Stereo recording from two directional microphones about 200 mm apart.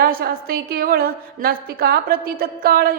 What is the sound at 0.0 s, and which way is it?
A woman's voice, 45° right (ahead or behind).